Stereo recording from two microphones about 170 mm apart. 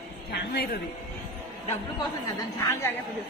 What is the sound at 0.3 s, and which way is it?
Speech, 60° left (ahead or behind).